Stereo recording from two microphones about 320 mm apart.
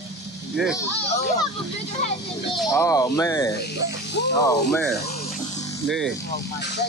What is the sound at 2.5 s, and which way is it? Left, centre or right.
Speech, centre.